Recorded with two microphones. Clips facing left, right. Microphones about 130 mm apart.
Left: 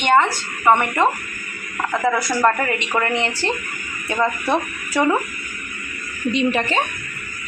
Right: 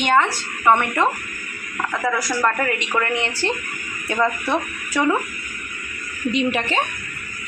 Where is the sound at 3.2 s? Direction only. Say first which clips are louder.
Left 1 dB; centre (ahead or behind).